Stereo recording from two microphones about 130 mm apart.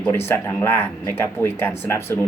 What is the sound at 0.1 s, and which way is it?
Speech, 20° left (ahead or behind).